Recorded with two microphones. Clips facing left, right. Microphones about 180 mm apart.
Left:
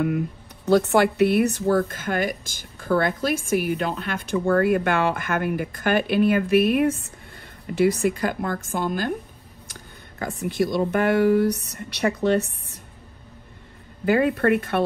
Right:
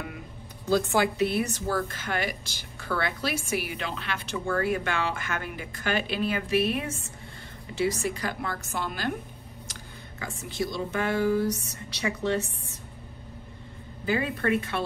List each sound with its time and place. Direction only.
0.7 s a woman's voice: 65° left (ahead or behind)
14.0 s speech: 60° left (ahead or behind)